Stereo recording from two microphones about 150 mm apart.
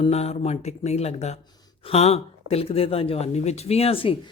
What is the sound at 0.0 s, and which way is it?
Speech, 45° left (ahead or behind).